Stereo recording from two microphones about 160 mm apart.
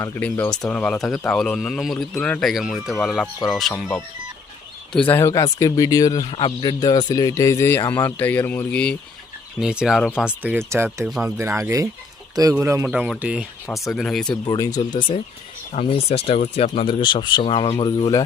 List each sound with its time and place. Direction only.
0.0 s speech: 15° left (ahead or behind)
5.0 s speech: 15° left (ahead or behind)
9.6 s speech: 5° right (ahead or behind)
12.8 s speech: 5° right (ahead or behind)
14.3 s speech: 25° left (ahead or behind)
15.7 s speech: 40° left (ahead or behind)